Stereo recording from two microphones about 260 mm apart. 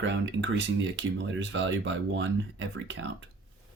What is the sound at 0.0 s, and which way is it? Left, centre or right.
Speech, right.